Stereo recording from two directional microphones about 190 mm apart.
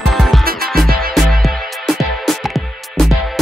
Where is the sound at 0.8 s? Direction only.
50° right (ahead or behind).